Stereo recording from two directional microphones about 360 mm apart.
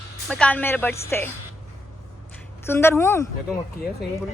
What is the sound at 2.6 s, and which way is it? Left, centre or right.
Speech, centre.